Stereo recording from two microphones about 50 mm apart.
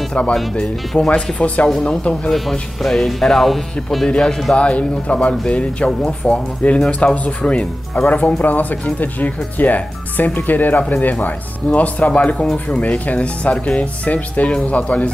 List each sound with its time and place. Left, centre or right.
0.1 s speech: left
2.8 s speech: centre
4.6 s speech: left